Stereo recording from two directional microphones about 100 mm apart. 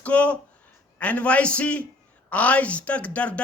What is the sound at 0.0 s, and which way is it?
Speech, 10° left (ahead or behind).